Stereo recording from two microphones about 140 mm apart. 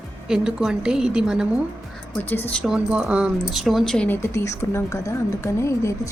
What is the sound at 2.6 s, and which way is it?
Speech, 5° right (ahead or behind).